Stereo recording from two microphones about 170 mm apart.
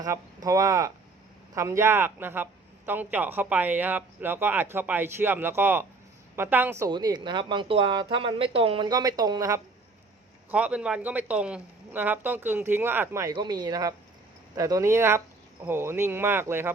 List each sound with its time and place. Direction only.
0.4 s a man's voice: 20° right (ahead or behind)
6.9 s speech: 25° right (ahead or behind)
10.5 s a man's voice: 5° right (ahead or behind)